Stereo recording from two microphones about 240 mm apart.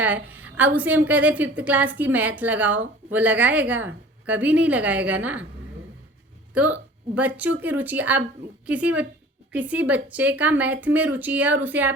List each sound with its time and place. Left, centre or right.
0.0 s a woman's voice: centre
6.5 s a woman's voice: centre